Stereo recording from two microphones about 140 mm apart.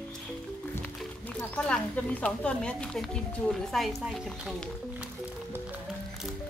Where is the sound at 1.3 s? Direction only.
10° left (ahead or behind).